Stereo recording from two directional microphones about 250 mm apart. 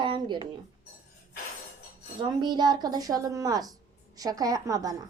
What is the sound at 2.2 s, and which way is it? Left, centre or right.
A woman's voice, centre.